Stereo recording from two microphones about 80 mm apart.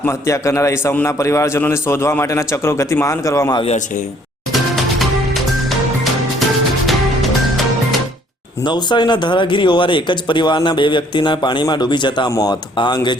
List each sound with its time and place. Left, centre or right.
0.1 s speech: left
4.5 s music: centre
6.8 s music: centre
8.6 s a man's voice: left
12.3 s speech: left
12.7 s a man's voice: left